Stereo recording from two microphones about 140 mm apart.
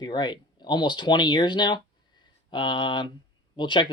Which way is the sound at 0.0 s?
30° left (ahead or behind).